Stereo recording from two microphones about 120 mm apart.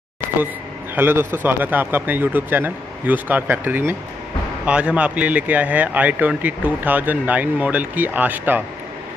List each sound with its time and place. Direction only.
0.9 s speech: 15° right (ahead or behind)